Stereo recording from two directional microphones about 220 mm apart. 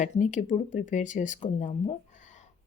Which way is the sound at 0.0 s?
35° left (ahead or behind).